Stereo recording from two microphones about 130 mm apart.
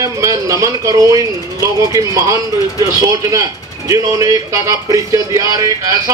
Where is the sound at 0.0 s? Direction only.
25° right (ahead or behind).